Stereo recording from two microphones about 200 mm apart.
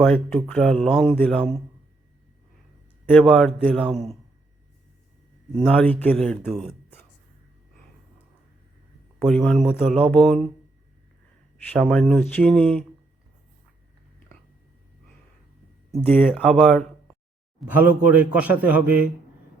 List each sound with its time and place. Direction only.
0.0 s speech: centre (ahead or behind)
3.1 s speech: 5° left (ahead or behind)
5.6 s speech: 5° left (ahead or behind)
9.1 s speech: centre (ahead or behind)
11.7 s speech: 5° left (ahead or behind)
15.9 s speech: 5° left (ahead or behind)
17.6 s a man's voice: 10° right (ahead or behind)